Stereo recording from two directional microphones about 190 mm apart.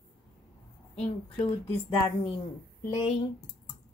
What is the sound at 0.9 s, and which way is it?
Speech, 10° left (ahead or behind).